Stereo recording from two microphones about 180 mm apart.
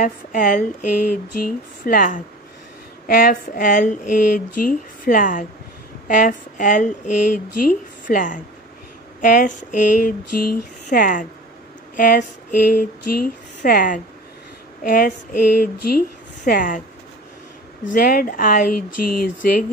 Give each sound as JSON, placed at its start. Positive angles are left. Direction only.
{"t": 0.0, "sound": "speech", "side_deg": 50}
{"t": 1.9, "sound": "speech", "side_deg": 50}
{"t": 17.9, "sound": "speech", "side_deg": 55}